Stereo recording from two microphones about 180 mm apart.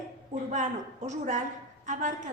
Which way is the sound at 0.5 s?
40° right (ahead or behind).